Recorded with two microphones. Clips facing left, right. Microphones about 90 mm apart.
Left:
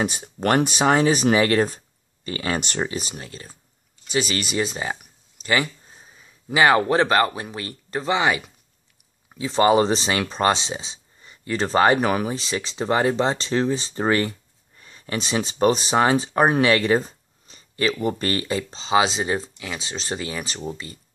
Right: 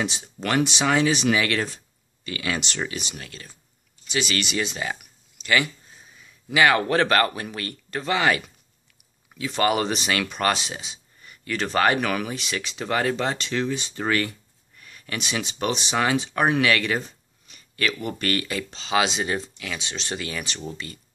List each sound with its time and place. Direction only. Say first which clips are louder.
0.0 s speech: left 5 dB; 45° left (ahead or behind); by 21.0 s 25° left (ahead or behind)